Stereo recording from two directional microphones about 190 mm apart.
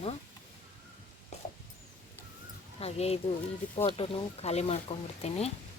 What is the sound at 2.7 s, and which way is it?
Speech, 35° left (ahead or behind).